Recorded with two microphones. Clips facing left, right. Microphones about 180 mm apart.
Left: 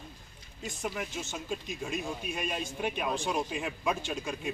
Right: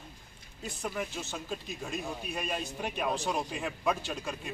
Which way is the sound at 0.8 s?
5° left (ahead or behind).